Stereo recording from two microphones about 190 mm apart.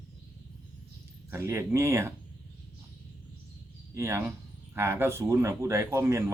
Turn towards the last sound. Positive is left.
turn(degrees=-15)  # may be behind; listen again after turning